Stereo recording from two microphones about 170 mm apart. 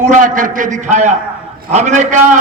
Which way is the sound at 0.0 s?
50° right (ahead or behind).